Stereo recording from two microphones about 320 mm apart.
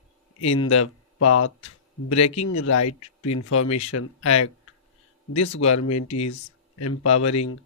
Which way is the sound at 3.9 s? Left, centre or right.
Left.